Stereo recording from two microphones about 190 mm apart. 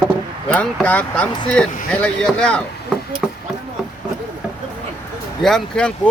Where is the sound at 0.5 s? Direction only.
5° left (ahead or behind).